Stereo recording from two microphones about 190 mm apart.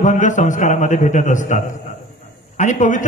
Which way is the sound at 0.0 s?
40° left (ahead or behind).